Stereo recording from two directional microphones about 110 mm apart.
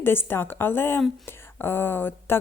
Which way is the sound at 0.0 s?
20° left (ahead or behind).